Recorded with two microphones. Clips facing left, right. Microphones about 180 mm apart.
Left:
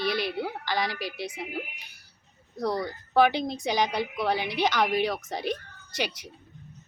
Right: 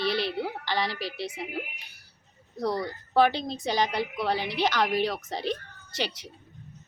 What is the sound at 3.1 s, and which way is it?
A woman's voice, 15° left (ahead or behind).